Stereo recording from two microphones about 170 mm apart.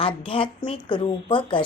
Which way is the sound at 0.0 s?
30° left (ahead or behind).